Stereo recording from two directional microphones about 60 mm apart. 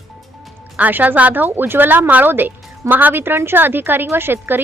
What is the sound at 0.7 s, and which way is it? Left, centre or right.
Speech, right.